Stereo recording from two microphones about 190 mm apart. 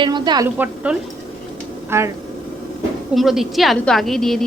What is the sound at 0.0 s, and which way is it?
Speech, 20° right (ahead or behind).